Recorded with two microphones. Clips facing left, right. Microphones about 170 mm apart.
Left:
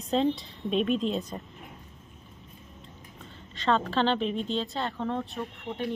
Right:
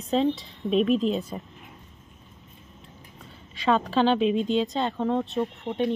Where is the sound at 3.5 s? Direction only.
10° right (ahead or behind).